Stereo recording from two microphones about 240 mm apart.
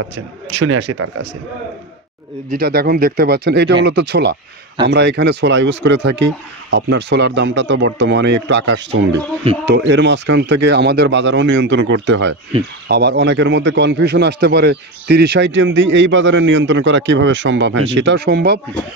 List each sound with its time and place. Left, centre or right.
0.6 s speech: right
2.5 s speech: right
9.1 s speech: right
9.7 s speech: right